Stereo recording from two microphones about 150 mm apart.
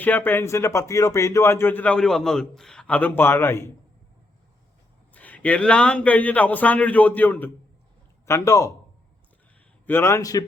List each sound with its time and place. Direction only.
0.0 s speech: 10° left (ahead or behind)
5.1 s a man's voice: 10° left (ahead or behind)
9.8 s a man's voice: 15° left (ahead or behind)